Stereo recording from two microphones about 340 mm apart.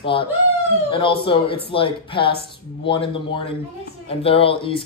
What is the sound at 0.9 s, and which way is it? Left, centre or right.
Speech, centre.